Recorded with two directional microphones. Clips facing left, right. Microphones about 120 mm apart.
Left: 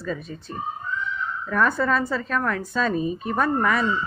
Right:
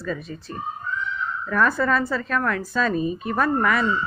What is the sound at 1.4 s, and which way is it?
A woman's voice, 20° left (ahead or behind).